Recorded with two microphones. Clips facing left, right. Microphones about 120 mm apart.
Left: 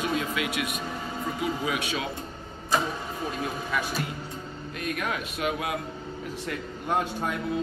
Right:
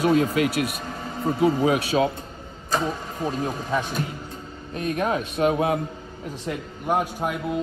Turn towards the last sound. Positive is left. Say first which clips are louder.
# right 4 dB
turn(degrees=-10)  # may be behind; listen again after turning